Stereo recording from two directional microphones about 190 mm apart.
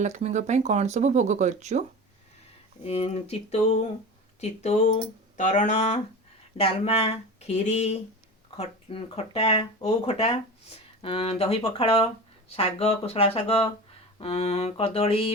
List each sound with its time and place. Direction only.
0.0 s speech: 35° right (ahead or behind)
2.8 s speech: 30° left (ahead or behind)